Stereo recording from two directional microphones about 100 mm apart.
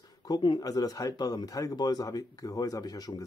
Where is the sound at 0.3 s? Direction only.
45° left (ahead or behind).